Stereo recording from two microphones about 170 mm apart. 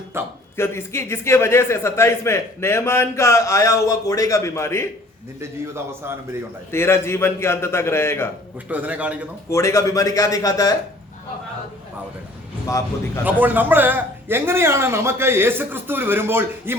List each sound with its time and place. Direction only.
0.1 s a man's voice: 15° right (ahead or behind)
0.5 s a man's voice: 15° left (ahead or behind)
5.4 s a man's voice: 15° right (ahead or behind)
6.7 s a man's voice: 15° left (ahead or behind)
8.7 s a man's voice: 10° right (ahead or behind)
9.5 s a man's voice: 15° left (ahead or behind)
13.2 s a man's voice: 10° right (ahead or behind)